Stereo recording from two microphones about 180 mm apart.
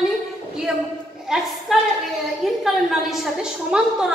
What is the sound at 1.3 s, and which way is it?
A woman's voice, centre (ahead or behind).